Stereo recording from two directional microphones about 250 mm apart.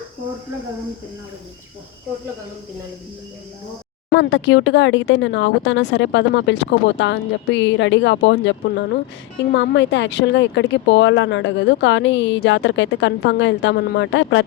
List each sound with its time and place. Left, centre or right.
4.1 s speech: left